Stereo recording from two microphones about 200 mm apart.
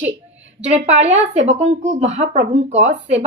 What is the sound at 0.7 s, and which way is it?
A woman's voice, 35° right (ahead or behind).